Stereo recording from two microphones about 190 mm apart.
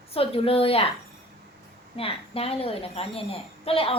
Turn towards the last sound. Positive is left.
turn(degrees=30)  # may be behind; listen again after turning